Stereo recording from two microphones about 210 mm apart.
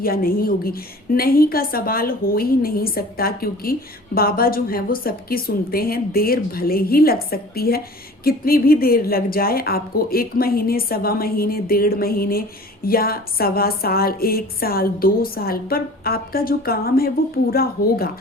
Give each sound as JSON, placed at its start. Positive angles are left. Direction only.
{"t": 0.0, "sound": "a woman's voice", "side_deg": 45}